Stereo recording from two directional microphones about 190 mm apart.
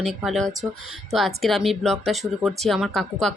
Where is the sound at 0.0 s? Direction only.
Centre (ahead or behind).